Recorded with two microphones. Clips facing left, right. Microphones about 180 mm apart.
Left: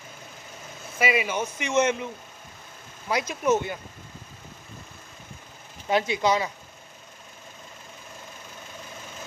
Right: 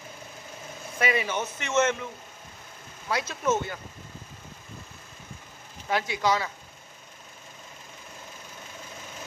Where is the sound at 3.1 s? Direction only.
15° left (ahead or behind).